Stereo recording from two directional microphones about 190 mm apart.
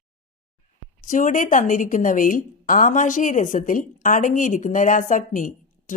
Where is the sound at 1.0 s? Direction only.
45° left (ahead or behind).